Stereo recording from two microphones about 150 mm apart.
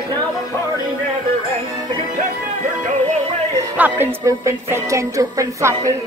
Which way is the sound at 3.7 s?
15° right (ahead or behind).